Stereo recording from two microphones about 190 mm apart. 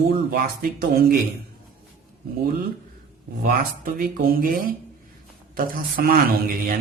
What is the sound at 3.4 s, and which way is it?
Speech, 50° right (ahead or behind).